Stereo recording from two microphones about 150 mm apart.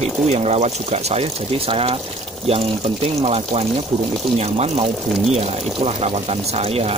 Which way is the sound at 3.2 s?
45° right (ahead or behind).